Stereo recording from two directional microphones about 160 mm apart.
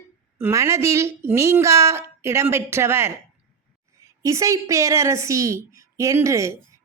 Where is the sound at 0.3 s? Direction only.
15° right (ahead or behind).